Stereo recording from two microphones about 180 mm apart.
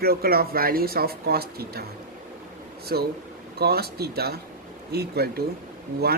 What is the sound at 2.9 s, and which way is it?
Speech, 60° right (ahead or behind).